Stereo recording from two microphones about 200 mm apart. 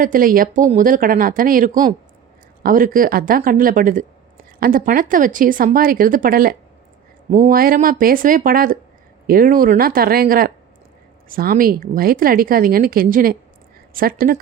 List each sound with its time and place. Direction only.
0.0 s a woman's voice: 45° right (ahead or behind)